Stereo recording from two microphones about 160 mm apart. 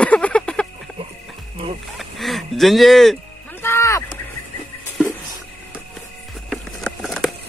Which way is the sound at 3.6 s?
15° left (ahead or behind).